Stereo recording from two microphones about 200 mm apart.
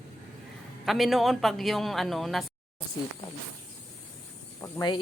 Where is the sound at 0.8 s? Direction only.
Centre (ahead or behind).